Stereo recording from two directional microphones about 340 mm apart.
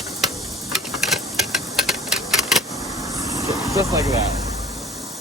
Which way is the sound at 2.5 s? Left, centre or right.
Centre.